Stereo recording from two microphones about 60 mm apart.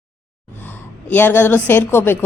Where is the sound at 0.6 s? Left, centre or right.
Left.